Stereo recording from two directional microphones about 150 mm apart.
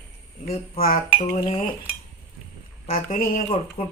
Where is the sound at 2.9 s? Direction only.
70° left (ahead or behind).